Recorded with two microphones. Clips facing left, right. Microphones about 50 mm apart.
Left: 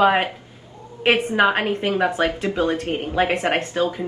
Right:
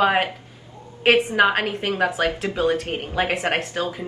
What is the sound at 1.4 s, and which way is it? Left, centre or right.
Speech, centre.